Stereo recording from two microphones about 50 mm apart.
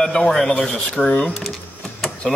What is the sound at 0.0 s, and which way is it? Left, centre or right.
A man's voice, centre.